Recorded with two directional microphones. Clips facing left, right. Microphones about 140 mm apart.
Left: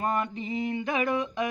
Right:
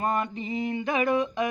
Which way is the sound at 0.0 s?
25° right (ahead or behind).